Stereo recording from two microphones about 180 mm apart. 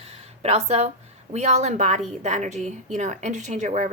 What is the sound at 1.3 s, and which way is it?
A woman's voice, 40° right (ahead or behind).